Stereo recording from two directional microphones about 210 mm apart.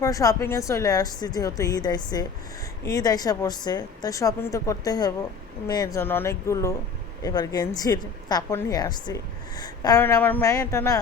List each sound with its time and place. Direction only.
0.0 s speech: 15° left (ahead or behind)